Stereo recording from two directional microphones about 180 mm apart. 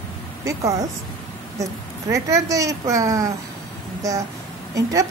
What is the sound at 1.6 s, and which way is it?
A woman's voice, 20° right (ahead or behind).